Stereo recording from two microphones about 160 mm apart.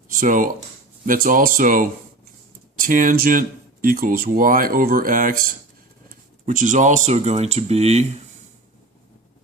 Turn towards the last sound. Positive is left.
turn(degrees=-40)  # may be behind; listen again after turning